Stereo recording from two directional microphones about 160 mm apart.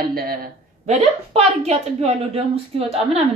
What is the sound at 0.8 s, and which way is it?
A woman's voice, 45° right (ahead or behind).